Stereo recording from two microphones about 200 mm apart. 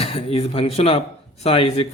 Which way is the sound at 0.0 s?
30° left (ahead or behind).